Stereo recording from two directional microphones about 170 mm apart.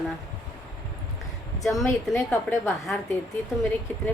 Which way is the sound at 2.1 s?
15° left (ahead or behind).